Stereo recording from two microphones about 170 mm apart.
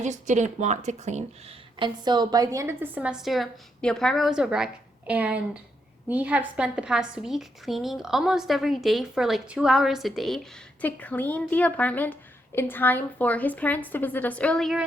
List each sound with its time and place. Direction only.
0.0 s speech: 45° right (ahead or behind)
1.8 s a woman's voice: 25° right (ahead or behind); by 14.8 s centre (ahead or behind)